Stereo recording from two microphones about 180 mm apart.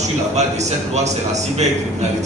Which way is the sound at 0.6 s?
40° right (ahead or behind).